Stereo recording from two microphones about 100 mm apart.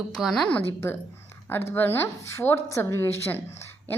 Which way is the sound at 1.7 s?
25° left (ahead or behind).